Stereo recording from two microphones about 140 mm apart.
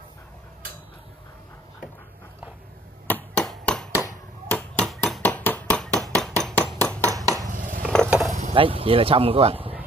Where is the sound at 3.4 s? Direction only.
5° left (ahead or behind).